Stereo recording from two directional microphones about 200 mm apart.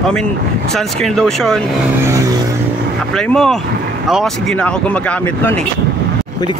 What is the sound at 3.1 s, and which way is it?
Speech, centre (ahead or behind).